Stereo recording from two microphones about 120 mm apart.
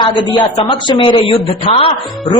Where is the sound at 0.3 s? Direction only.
40° left (ahead or behind).